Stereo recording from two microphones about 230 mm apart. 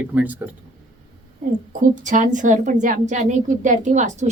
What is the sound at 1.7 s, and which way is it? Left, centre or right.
A woman's voice, right.